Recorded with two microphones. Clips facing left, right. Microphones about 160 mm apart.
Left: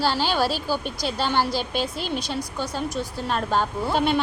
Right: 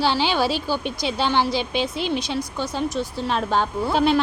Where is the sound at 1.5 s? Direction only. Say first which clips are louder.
Right 2 dB; 40° left (ahead or behind).